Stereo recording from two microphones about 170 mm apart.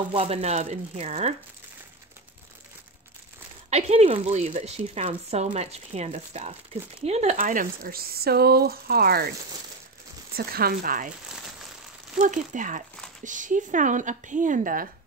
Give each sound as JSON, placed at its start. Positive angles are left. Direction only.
{"t": 0.1, "sound": "a woman's voice", "side_deg": -35}
{"t": 3.7, "sound": "a woman's voice", "side_deg": -35}
{"t": 7.3, "sound": "speech", "side_deg": -55}
{"t": 10.3, "sound": "speech", "side_deg": -65}
{"t": 12.2, "sound": "speech", "side_deg": -50}